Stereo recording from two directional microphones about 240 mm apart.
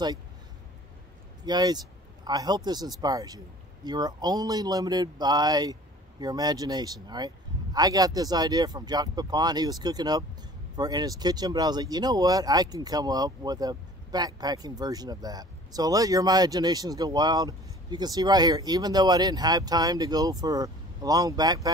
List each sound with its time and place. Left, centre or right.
1.4 s a man's voice: centre